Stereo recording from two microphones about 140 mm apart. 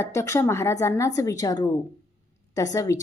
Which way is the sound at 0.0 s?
20° left (ahead or behind).